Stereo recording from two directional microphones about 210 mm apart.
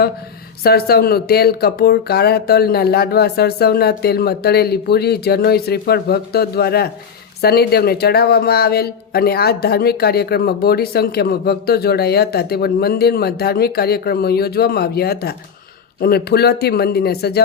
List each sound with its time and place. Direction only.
0.6 s speech: 50° left (ahead or behind)